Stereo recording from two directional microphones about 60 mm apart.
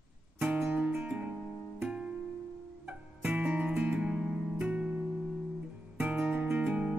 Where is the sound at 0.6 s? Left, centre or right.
Centre.